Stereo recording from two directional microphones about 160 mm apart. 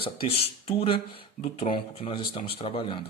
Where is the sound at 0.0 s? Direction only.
35° left (ahead or behind).